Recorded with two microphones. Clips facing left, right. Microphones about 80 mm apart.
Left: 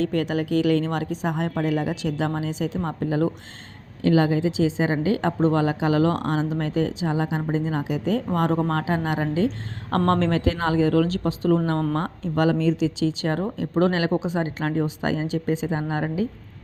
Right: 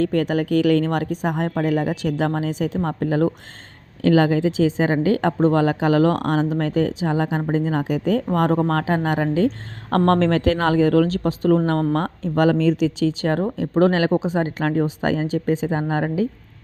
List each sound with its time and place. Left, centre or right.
0.0 s a woman's voice: right
4.0 s a woman's voice: right
10.1 s a woman's voice: right
12.5 s a woman's voice: right